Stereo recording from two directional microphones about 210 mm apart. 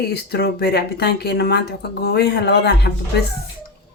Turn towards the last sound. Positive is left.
turn(degrees=50)  # may be behind; listen again after turning